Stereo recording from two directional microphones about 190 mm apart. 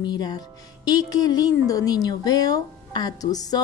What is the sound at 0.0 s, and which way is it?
Speech, 20° left (ahead or behind).